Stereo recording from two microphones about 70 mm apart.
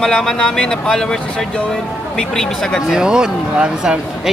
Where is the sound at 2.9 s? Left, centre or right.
Centre.